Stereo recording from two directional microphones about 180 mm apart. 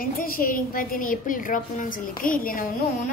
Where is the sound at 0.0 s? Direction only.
50° left (ahead or behind).